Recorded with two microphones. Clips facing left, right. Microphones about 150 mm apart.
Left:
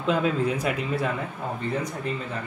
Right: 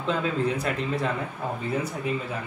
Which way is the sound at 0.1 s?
10° left (ahead or behind).